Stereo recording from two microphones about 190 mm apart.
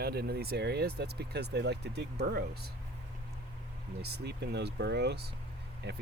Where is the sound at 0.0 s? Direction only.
55° right (ahead or behind).